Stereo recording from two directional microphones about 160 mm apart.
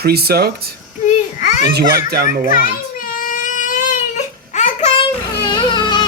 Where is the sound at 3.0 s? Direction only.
60° left (ahead or behind).